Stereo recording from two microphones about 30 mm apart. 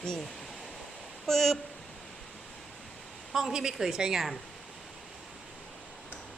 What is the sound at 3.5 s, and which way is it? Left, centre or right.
Speech, centre.